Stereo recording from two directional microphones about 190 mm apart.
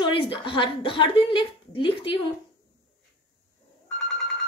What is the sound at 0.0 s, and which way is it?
A woman's voice, 25° left (ahead or behind).